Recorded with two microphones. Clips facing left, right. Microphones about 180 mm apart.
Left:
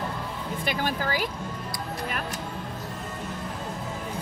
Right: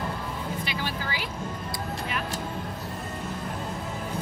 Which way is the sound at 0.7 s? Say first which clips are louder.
Left 5 dB; 50° left (ahead or behind).